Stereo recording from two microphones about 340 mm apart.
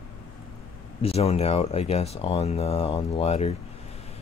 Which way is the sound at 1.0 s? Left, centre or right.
Centre.